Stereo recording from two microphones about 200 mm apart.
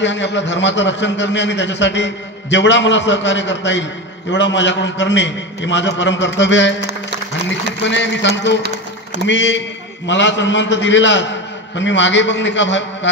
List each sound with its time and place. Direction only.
0.0 s a man's voice: 65° left (ahead or behind)